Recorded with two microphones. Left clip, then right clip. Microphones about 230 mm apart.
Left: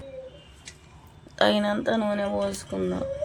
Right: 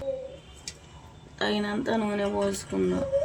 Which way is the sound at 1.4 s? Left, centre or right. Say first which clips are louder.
Left 6 dB; left.